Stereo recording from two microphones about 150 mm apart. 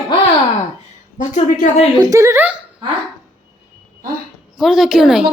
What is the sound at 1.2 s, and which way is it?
Speech, 55° left (ahead or behind).